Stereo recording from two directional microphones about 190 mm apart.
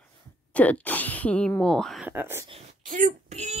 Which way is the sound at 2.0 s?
10° right (ahead or behind).